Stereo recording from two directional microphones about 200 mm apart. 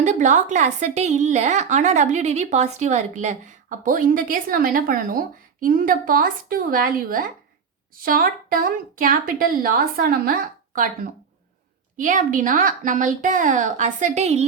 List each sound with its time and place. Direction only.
0.0 s a woman's voice: 35° right (ahead or behind)
11.9 s a woman's voice: 40° right (ahead or behind)